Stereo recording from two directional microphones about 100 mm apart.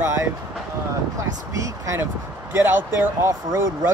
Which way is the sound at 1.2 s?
35° right (ahead or behind).